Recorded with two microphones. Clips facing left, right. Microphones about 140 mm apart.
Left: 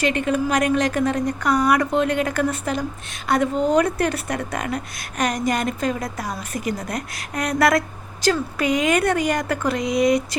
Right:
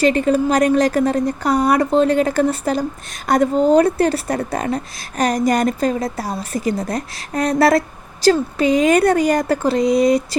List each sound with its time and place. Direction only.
0.0 s a woman's voice: 35° right (ahead or behind)